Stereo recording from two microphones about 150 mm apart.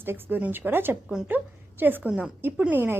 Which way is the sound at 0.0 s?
15° right (ahead or behind).